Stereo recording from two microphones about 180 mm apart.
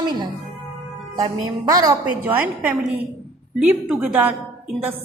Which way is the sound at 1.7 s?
20° right (ahead or behind).